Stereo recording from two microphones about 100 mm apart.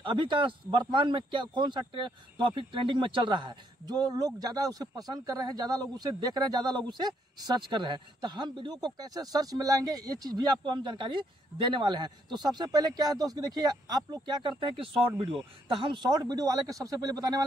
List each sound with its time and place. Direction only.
0.0 s speech: 55° right (ahead or behind)
14.4 s speech: 60° right (ahead or behind)
15.8 s a man's voice: 50° right (ahead or behind)